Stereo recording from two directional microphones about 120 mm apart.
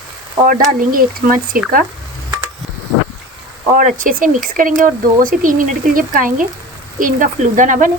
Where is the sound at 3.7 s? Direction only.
90° right.